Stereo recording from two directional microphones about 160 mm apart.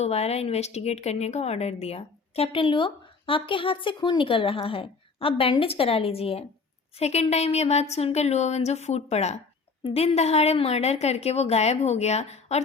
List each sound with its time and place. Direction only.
0.0 s a woman's voice: 40° left (ahead or behind)